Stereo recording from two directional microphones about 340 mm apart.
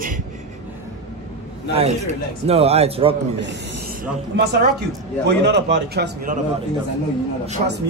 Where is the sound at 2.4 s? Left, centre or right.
Centre.